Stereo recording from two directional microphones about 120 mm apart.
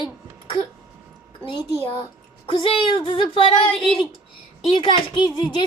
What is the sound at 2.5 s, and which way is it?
Speech, 50° left (ahead or behind).